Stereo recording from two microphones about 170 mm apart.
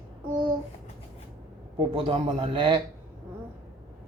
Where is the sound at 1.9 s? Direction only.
30° right (ahead or behind).